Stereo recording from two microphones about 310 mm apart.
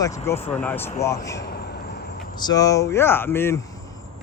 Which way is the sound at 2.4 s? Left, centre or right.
Centre.